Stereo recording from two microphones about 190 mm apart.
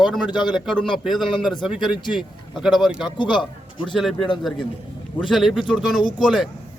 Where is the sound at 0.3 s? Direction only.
25° left (ahead or behind).